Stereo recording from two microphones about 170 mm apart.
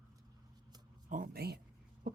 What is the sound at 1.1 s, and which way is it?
Speech, 60° right (ahead or behind).